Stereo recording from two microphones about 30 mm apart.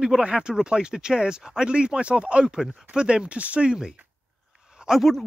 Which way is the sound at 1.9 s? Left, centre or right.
Right.